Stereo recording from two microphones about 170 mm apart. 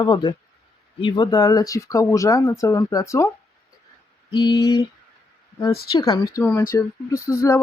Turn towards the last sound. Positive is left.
turn(degrees=20)  # may be behind; listen again after turning